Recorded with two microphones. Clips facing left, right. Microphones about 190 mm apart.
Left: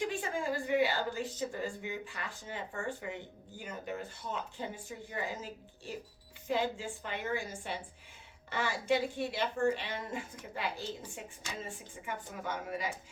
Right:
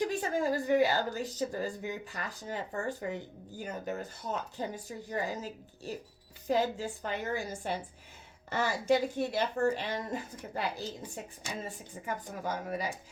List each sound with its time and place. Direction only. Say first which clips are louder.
0.0 s a woman's voice: right 4 dB; 40° right (ahead or behind)